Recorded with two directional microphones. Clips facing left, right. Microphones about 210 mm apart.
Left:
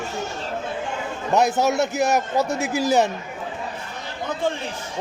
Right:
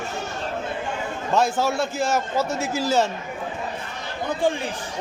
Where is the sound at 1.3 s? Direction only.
20° left (ahead or behind).